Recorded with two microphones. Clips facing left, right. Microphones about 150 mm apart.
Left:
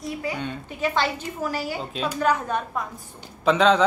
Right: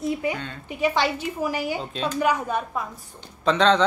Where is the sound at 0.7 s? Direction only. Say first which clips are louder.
Right 3 dB; 10° right (ahead or behind).